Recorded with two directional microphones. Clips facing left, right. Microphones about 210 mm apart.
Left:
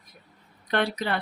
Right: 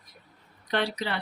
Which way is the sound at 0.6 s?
55° left (ahead or behind).